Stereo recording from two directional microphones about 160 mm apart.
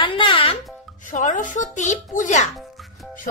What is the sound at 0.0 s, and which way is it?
Music, 30° left (ahead or behind).